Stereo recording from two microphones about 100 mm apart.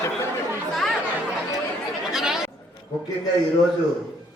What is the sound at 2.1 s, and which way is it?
Speech, 5° right (ahead or behind).